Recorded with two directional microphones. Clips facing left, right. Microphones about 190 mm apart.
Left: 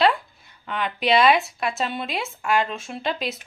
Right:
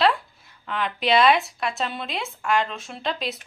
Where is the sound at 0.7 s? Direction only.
Centre (ahead or behind).